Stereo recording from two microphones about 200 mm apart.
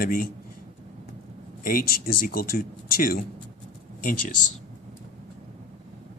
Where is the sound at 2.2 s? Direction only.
50° left (ahead or behind).